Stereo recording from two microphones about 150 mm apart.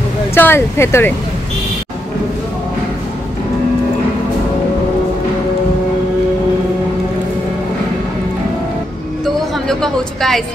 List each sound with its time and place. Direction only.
0.3 s speech: 15° left (ahead or behind)
9.2 s music: centre (ahead or behind)